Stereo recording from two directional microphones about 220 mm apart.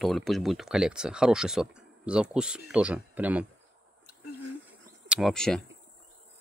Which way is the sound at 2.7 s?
5° right (ahead or behind).